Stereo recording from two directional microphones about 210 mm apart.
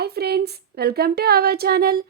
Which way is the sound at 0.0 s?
50° right (ahead or behind).